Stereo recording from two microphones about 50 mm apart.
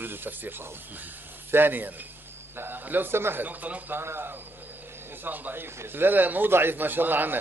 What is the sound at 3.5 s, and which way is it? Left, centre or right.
Speech, right.